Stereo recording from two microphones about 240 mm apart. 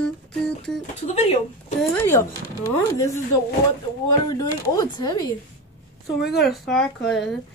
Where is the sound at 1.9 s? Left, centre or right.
Centre.